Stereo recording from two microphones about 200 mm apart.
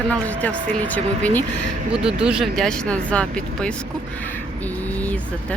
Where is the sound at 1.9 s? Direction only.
5° right (ahead or behind).